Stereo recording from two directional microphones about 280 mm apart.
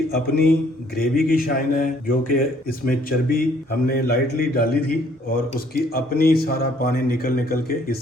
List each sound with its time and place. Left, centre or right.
0.1 s speech: left